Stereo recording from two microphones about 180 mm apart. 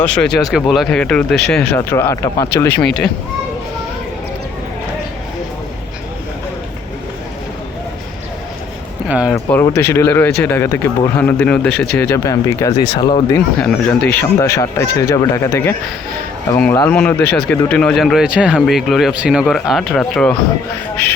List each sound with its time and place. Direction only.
0.0 s speech: 5° left (ahead or behind)
1.9 s speech: 15° left (ahead or behind)
9.0 s speech: 5° right (ahead or behind)
9.7 s speech: 15° left (ahead or behind)
13.6 s speech: 5° left (ahead or behind)